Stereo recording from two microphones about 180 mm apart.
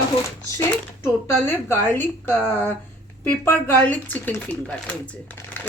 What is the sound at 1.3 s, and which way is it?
Speech, 15° left (ahead or behind).